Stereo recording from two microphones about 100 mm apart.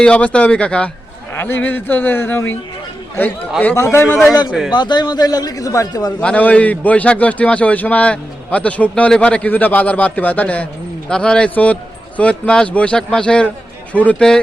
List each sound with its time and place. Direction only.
0.0 s a man's voice: 10° left (ahead or behind)
1.4 s speech: 20° left (ahead or behind)
3.8 s speech: 25° left (ahead or behind)
4.7 s a man's voice: 50° left (ahead or behind)
6.1 s a man's voice: 15° left (ahead or behind)